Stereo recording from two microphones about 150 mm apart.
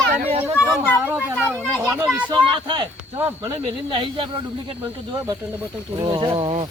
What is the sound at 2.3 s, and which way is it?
Speech, 35° right (ahead or behind).